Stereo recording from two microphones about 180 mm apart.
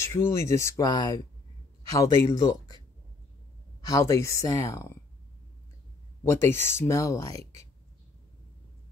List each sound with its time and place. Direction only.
0.0 s speech: 15° left (ahead or behind)
3.8 s speech: 15° left (ahead or behind)
6.2 s speech: 15° left (ahead or behind)